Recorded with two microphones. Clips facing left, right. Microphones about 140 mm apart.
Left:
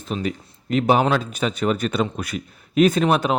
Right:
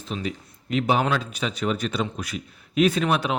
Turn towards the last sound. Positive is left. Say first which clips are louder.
# left 4 dB
turn(degrees=40)  # may be behind; listen again after turning